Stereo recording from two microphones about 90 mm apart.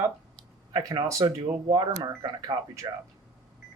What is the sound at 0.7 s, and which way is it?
Speech, 45° right (ahead or behind).